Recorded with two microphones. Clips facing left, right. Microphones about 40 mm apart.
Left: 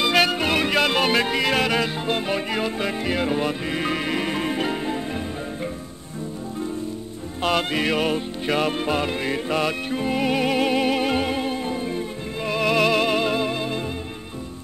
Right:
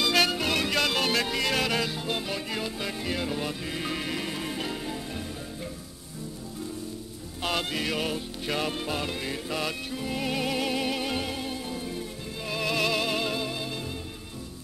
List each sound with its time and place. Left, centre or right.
0.0 s music: centre
7.7 s music: left